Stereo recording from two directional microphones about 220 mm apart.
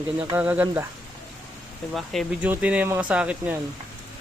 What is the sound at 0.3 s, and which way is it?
Speech, 10° right (ahead or behind).